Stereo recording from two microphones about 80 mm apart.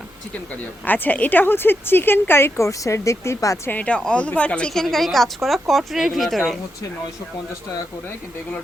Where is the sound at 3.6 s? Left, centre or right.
Centre.